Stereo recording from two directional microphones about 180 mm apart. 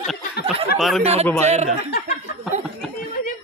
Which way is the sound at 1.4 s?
40° right (ahead or behind).